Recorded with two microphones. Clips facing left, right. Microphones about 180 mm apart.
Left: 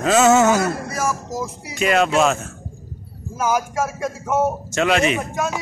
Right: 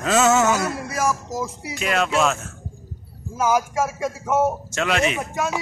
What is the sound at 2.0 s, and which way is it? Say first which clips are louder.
Speech: left 3 dB; 35° left (ahead or behind).